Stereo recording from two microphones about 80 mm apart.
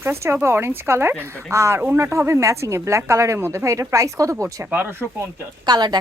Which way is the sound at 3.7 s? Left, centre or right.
Right.